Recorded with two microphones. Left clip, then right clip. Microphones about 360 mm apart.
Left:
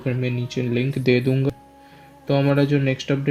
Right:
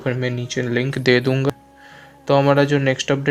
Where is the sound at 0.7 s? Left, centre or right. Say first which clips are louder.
Right 3 dB; right.